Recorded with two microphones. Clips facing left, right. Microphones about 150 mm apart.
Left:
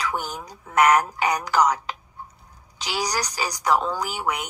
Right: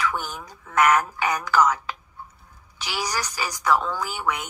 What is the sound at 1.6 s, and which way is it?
Speech, 15° left (ahead or behind).